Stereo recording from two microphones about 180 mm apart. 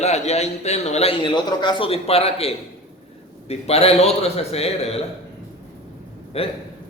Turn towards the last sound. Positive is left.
turn(degrees=35)  # may be behind; listen again after turning